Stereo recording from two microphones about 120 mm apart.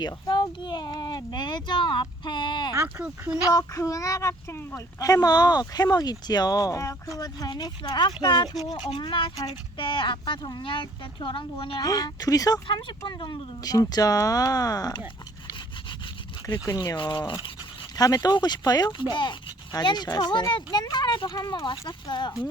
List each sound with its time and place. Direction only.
0.0 s speech: 40° left (ahead or behind)
2.8 s speech: 10° right (ahead or behind)
3.5 s speech: 25° left (ahead or behind); by 11.8 s 45° left (ahead or behind)
11.8 s speech: 30° left (ahead or behind)
13.1 s speech: 40° left (ahead or behind)
16.6 s speech: 30° left (ahead or behind)
17.9 s speech: 30° left (ahead or behind)